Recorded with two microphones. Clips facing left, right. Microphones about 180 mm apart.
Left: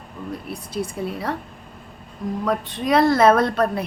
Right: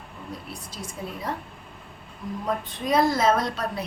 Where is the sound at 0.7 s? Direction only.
65° left (ahead or behind).